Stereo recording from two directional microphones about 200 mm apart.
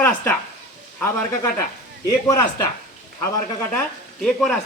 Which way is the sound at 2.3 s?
15° left (ahead or behind).